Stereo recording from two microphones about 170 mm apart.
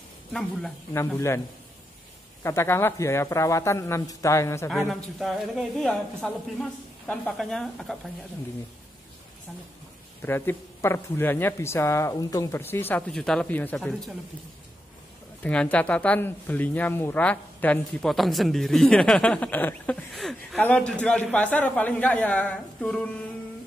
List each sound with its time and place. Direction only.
0.3 s a woman's voice: centre (ahead or behind)
0.9 s speech: 15° left (ahead or behind)
2.4 s speech: 15° left (ahead or behind)
4.6 s a woman's voice: centre (ahead or behind)
10.2 s speech: 15° left (ahead or behind)
15.4 s speech: 5° left (ahead or behind)